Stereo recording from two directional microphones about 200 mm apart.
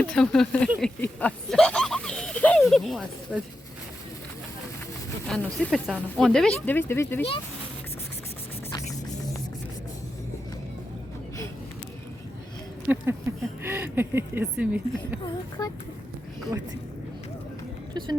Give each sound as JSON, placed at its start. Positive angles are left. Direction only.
{"t": 0.0, "sound": "speech", "side_deg": 5}
{"t": 0.7, "sound": "a sound", "side_deg": 0}
{"t": 5.3, "sound": "speech", "side_deg": 5}
{"t": 12.9, "sound": "speech", "side_deg": -5}
{"t": 15.2, "sound": "speech", "side_deg": 20}
{"t": 17.9, "sound": "a woman's voice", "side_deg": -20}